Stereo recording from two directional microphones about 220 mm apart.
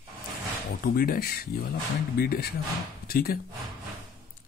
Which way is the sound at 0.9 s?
40° left (ahead or behind).